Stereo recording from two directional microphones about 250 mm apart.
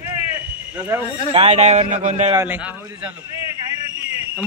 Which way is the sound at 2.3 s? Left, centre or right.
Centre.